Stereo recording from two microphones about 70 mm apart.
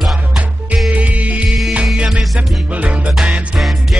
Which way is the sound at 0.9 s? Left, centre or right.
Right.